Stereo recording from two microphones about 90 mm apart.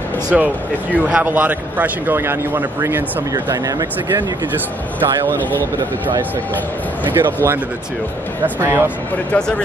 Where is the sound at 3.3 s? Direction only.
40° right (ahead or behind).